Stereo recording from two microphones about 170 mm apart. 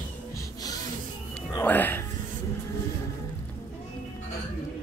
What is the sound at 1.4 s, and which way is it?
Speech, 15° left (ahead or behind).